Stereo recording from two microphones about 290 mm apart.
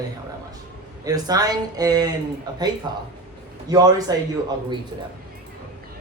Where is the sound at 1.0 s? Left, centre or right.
Centre.